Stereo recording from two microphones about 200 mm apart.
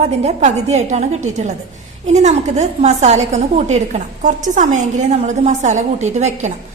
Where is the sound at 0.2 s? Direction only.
35° right (ahead or behind).